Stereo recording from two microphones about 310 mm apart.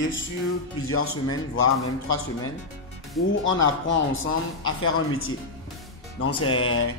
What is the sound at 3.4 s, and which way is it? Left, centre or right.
Speech, left.